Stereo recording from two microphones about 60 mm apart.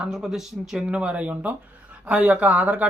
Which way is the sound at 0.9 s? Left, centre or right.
Centre.